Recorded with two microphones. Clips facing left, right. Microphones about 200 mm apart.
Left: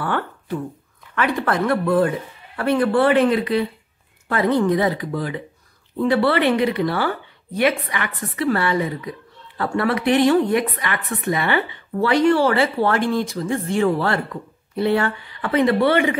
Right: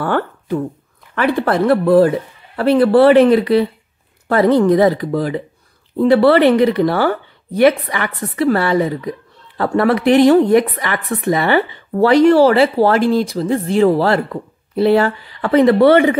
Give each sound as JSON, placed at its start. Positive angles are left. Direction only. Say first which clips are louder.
{"t": 0.0, "sound": "speech", "louder": "right 6 dB", "side_deg": -40}
{"t": 8.4, "sound": "speech", "louder": "right 6 dB", "side_deg": -40}